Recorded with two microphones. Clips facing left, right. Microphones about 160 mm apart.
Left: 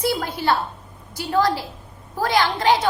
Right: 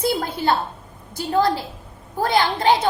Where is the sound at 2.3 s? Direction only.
30° right (ahead or behind).